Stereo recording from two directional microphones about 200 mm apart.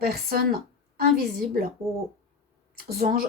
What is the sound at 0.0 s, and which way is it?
A woman's voice, 50° right (ahead or behind).